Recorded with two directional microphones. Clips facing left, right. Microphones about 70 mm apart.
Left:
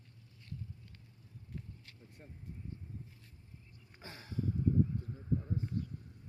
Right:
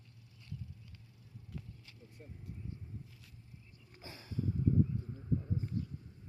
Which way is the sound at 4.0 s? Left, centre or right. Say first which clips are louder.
Left 1 dB; left.